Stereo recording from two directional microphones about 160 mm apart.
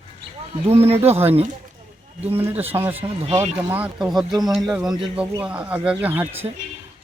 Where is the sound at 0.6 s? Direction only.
40° right (ahead or behind).